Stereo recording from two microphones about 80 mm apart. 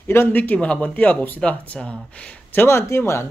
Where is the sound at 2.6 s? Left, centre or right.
Left.